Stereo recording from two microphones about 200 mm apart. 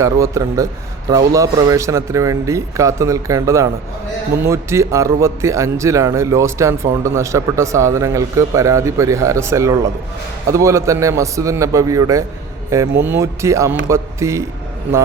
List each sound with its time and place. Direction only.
0.0 s a man's voice: 15° right (ahead or behind)